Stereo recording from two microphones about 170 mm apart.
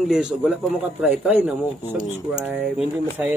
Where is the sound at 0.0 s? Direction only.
5° right (ahead or behind).